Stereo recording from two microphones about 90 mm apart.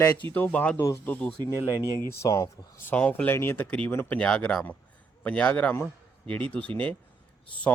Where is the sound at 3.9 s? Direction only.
25° left (ahead or behind).